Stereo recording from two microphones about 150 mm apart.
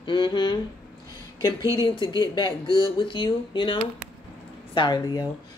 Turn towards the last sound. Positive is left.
turn(degrees=25)  # may be behind; listen again after turning